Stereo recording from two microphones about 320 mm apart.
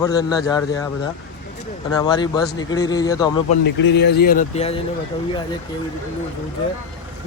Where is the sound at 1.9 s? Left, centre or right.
Centre.